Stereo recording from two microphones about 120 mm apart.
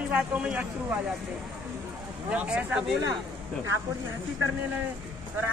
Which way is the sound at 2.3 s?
10° right (ahead or behind).